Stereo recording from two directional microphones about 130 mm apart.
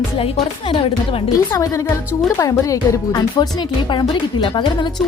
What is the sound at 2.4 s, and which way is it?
A woman's voice, 25° left (ahead or behind).